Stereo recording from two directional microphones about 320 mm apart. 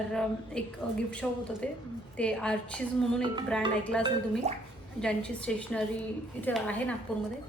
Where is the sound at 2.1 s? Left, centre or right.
Centre.